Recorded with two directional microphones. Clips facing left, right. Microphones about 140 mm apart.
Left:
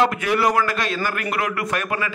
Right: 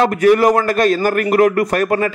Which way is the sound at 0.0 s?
45° right (ahead or behind).